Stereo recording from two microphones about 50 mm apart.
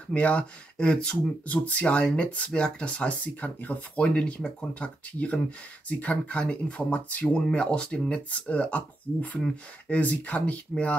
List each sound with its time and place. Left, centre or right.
0.1 s speech: left